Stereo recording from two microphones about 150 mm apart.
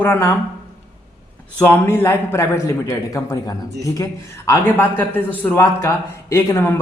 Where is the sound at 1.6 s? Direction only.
15° left (ahead or behind).